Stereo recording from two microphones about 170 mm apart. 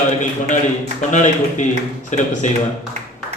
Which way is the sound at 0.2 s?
45° left (ahead or behind).